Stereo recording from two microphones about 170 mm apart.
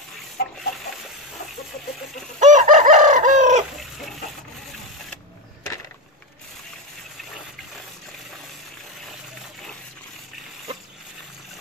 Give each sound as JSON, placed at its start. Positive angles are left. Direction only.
{"t": 0.4, "sound": "chicken", "side_deg": 60}
{"t": 2.4, "sound": "chicken", "side_deg": -50}